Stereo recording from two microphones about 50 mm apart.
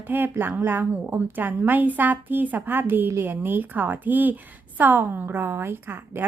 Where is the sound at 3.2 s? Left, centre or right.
Right.